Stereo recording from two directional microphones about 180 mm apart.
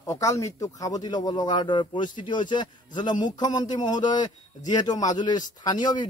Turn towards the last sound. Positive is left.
turn(degrees=25)  # may be behind; listen again after turning